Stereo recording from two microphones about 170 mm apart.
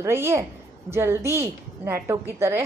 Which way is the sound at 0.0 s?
15° right (ahead or behind).